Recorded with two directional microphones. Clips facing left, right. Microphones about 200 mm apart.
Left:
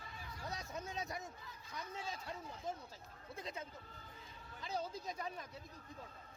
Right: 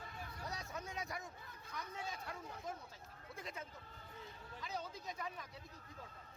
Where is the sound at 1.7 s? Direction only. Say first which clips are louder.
Left 1 dB; 25° left (ahead or behind).